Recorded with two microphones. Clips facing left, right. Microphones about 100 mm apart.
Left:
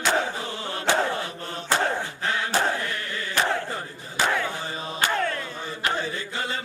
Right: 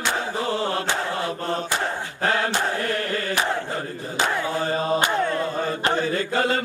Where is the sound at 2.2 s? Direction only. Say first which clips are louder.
Right 3 dB; 50° right (ahead or behind).